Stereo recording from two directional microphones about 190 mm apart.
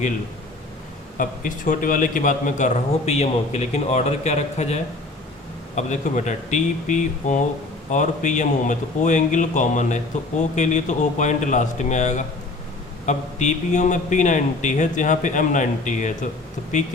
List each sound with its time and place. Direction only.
1.2 s a man's voice: 45° left (ahead or behind)